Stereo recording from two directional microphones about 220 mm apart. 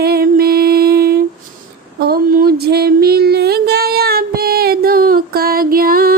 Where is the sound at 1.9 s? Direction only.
45° right (ahead or behind).